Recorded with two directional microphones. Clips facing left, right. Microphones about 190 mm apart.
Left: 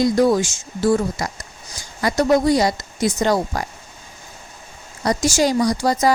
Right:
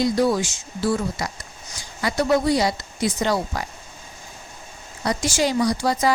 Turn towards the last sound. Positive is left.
turn(degrees=40)  # may be behind; listen again after turning